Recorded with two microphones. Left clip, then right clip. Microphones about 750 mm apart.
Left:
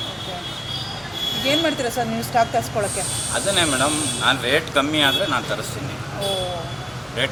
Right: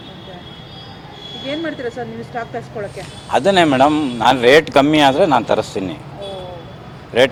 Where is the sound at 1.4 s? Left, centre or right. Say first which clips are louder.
Left 2 dB; centre.